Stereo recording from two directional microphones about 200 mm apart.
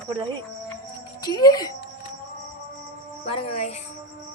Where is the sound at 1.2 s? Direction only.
20° left (ahead or behind).